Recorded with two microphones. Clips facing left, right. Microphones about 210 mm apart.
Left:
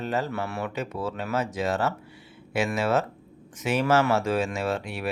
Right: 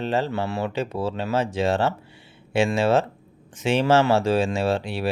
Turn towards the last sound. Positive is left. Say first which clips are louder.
# right 5 dB
turn(degrees=-30)  # may be behind; listen again after turning